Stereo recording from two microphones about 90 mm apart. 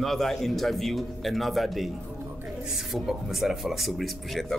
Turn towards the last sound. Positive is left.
turn(degrees=0)  # may be behind; listen again after turning